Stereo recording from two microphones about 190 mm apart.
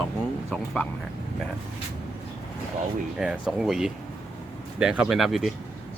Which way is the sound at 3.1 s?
5° right (ahead or behind).